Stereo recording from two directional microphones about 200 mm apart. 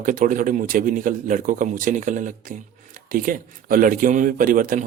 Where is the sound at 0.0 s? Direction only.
40° right (ahead or behind).